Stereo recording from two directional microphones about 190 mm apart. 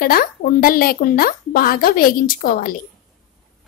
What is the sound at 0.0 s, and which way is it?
Speech, 50° left (ahead or behind).